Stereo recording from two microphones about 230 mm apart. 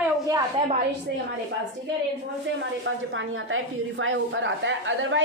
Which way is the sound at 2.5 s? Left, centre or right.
Right.